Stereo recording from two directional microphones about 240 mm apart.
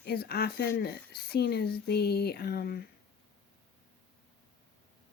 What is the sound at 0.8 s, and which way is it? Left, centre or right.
Speech, left.